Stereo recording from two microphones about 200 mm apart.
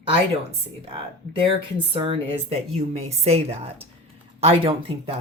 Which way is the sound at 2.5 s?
30° right (ahead or behind).